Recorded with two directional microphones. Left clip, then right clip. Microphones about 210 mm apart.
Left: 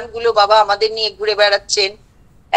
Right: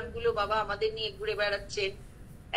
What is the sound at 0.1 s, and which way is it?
A woman's voice, 55° left (ahead or behind).